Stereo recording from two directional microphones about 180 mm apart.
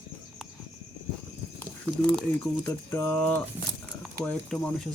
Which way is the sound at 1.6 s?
5° left (ahead or behind).